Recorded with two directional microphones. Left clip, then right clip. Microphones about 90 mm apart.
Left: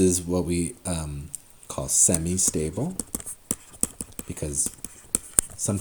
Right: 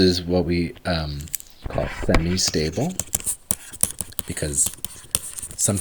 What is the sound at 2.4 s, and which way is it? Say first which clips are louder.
Speech: right 5 dB; 20° right (ahead or behind).